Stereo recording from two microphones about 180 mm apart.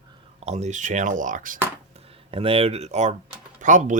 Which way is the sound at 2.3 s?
30° right (ahead or behind).